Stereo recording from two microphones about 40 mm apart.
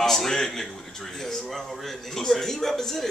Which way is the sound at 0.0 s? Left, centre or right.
Centre.